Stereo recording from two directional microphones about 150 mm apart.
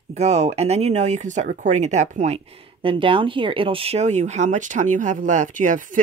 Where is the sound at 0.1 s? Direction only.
45° right (ahead or behind).